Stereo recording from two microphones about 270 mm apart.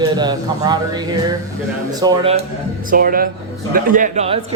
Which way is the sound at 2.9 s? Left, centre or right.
Right.